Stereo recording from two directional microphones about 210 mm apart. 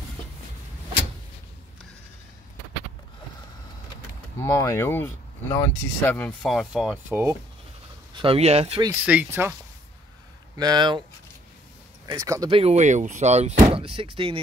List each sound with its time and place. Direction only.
4.4 s speech: 15° left (ahead or behind); by 7.3 s 10° right (ahead or behind)
8.1 s speech: 25° right (ahead or behind)
9.0 s speech: 5° right (ahead or behind)
10.6 s speech: 20° right (ahead or behind)
12.1 s speech: 15° right (ahead or behind)